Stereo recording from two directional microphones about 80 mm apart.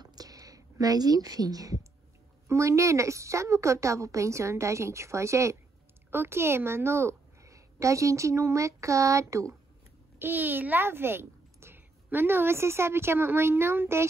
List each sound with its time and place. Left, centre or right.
0.0 s a sound: right
2.4 s a woman's voice: right
10.1 s a child's voice: right